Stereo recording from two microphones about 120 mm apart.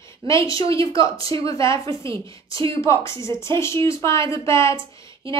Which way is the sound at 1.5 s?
25° left (ahead or behind).